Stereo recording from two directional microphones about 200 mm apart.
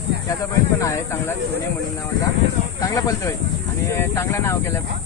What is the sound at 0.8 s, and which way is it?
Speech, 15° left (ahead or behind).